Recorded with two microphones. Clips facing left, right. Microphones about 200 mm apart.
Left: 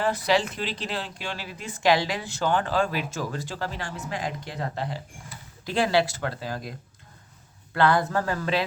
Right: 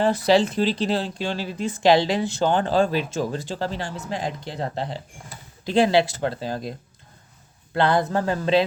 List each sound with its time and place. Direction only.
0.0 s speech: 25° right (ahead or behind)